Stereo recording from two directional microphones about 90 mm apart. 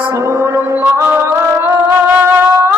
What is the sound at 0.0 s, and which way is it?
Music, 30° right (ahead or behind).